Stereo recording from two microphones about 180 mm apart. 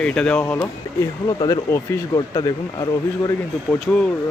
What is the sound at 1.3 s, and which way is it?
Speech, 20° left (ahead or behind).